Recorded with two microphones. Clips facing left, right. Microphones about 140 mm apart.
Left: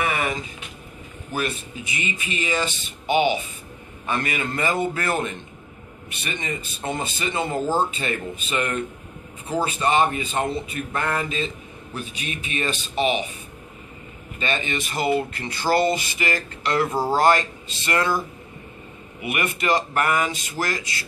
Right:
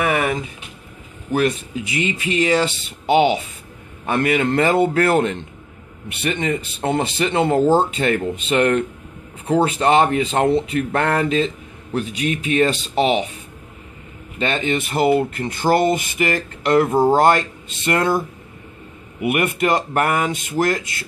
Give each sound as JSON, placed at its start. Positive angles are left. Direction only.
{"t": 0.0, "sound": "a sound", "side_deg": -60}
{"t": 1.3, "sound": "speech", "side_deg": -75}
{"t": 4.0, "sound": "speech", "side_deg": -65}
{"t": 9.7, "sound": "speech", "side_deg": -80}
{"t": 14.4, "sound": "speech", "side_deg": -65}
{"t": 19.2, "sound": "a man's voice", "side_deg": -55}